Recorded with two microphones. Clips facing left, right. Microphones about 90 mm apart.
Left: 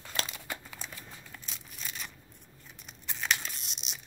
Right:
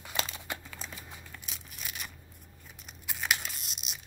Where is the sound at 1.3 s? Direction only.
5° right (ahead or behind).